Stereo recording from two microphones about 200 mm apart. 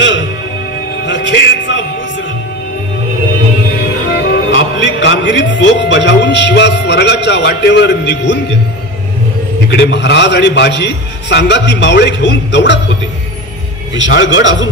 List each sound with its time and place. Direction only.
0.0 s music: 65° left (ahead or behind)
4.1 s speech: 65° left (ahead or behind)
9.7 s a man's voice: 60° left (ahead or behind)
13.9 s a man's voice: 65° left (ahead or behind)